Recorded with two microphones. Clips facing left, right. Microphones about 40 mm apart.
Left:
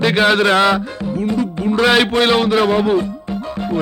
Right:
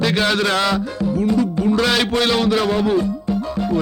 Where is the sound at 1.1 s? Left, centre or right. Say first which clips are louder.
Right 1 dB; left.